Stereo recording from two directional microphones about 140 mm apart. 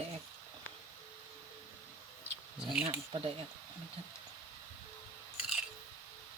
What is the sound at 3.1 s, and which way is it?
Speech, 40° right (ahead or behind).